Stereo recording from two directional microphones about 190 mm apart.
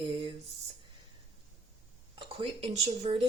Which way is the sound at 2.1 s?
30° right (ahead or behind).